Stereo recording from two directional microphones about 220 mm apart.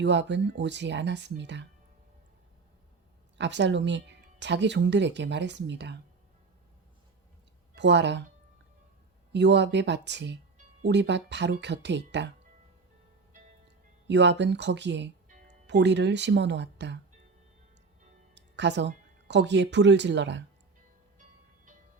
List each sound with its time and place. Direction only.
0.0 s speech: 50° right (ahead or behind)
3.3 s speech: 55° right (ahead or behind)
7.8 s speech: 50° right (ahead or behind)
9.3 s speech: 50° right (ahead or behind)
14.1 s speech: 50° right (ahead or behind)
18.3 s music: 50° right (ahead or behind)
19.3 s speech: 50° right (ahead or behind)